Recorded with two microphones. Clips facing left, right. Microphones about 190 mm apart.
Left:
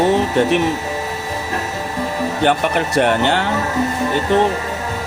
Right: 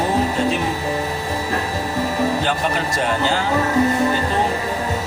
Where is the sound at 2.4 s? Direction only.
65° left (ahead or behind).